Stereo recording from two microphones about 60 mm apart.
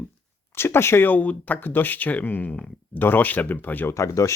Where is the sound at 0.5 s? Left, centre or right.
Left.